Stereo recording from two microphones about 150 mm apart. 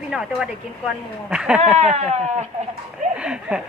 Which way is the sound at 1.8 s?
45° right (ahead or behind).